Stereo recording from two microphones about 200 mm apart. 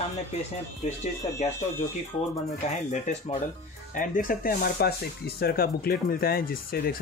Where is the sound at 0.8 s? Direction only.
35° left (ahead or behind).